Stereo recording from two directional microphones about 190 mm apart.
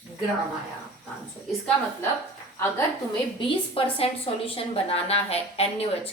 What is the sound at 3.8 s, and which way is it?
A woman's voice, 30° left (ahead or behind).